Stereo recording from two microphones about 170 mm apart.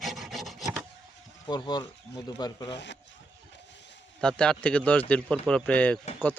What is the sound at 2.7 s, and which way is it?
Speech, 90° left.